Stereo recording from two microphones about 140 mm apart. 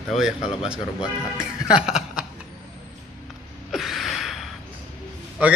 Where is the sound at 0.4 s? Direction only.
40° left (ahead or behind).